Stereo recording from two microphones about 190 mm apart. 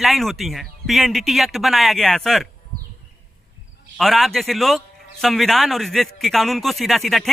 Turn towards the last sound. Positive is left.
turn(degrees=0)  # may be behind; listen again after turning